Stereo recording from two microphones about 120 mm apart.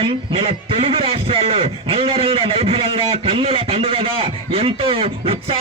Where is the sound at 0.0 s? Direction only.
50° right (ahead or behind).